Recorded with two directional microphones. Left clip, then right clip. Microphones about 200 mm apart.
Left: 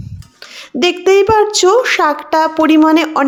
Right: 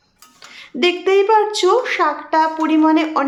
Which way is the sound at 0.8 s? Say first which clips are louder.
Left 4 dB; 30° left (ahead or behind).